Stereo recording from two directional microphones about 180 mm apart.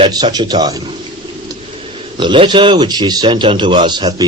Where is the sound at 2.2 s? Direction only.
25° right (ahead or behind).